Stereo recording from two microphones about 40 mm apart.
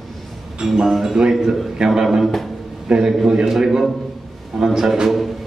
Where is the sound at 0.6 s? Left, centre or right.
Centre.